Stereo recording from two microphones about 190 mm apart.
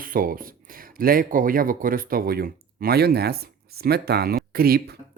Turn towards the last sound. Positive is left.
turn(degrees=-55)  # may be behind; listen again after turning